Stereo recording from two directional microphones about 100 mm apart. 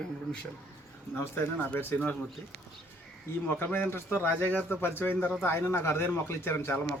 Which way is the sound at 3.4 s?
15° left (ahead or behind).